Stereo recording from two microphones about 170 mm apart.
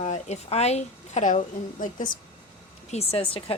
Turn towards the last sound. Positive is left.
turn(degrees=35)  # may be behind; listen again after turning